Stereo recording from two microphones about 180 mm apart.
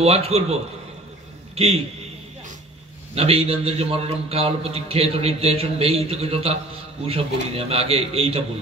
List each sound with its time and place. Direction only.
0.0 s a man's voice: 35° right (ahead or behind)
3.2 s a man's voice: 35° right (ahead or behind)